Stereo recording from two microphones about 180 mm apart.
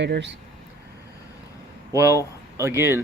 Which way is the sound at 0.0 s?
75° right (ahead or behind).